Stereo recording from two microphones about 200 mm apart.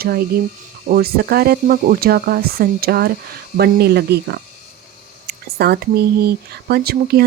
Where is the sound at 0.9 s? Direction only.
50° right (ahead or behind).